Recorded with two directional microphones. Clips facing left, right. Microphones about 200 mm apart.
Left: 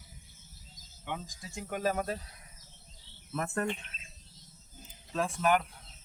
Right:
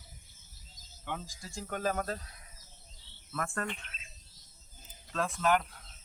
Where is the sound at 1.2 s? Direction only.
5° left (ahead or behind).